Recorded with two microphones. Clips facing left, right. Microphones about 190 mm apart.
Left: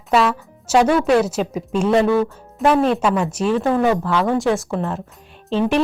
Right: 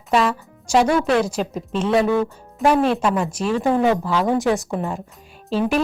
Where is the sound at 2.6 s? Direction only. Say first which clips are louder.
Left 1 dB; 5° right (ahead or behind).